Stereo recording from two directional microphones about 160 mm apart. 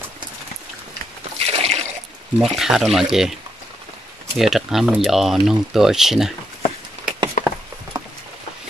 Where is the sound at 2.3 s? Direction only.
Centre (ahead or behind).